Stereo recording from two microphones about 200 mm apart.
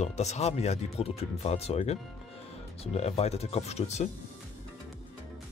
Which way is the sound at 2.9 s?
30° left (ahead or behind).